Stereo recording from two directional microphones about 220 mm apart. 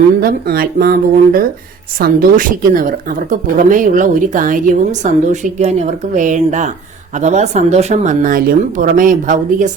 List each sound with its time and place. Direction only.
0.2 s speech: 45° right (ahead or behind)